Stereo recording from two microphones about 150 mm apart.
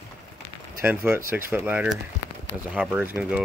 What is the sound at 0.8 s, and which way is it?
Speech, 15° right (ahead or behind).